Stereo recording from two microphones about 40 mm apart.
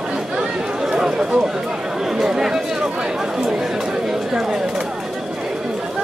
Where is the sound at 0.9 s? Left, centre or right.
Centre.